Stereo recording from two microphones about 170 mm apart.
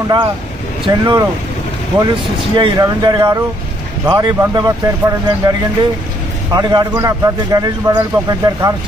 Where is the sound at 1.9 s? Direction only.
30° right (ahead or behind).